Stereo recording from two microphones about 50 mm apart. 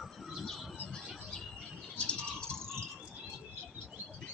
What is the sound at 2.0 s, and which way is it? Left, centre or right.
Bird, left.